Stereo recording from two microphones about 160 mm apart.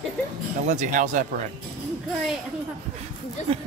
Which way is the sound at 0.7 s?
50° right (ahead or behind).